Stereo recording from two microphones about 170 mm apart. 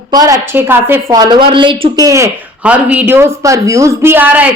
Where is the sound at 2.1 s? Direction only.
15° right (ahead or behind).